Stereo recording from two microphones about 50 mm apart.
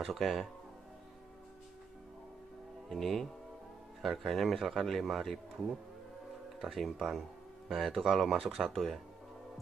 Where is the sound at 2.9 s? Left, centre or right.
Centre.